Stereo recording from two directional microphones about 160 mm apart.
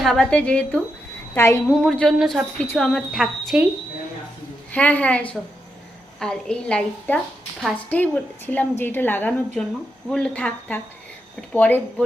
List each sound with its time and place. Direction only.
0.0 s a woman's voice: 5° left (ahead or behind)
1.6 s speech: 5° left (ahead or behind)
4.7 s a woman's voice: 10° left (ahead or behind)